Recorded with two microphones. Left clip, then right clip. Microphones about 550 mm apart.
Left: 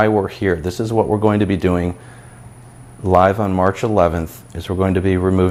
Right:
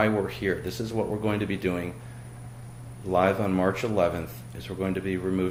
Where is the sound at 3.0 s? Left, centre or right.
Left.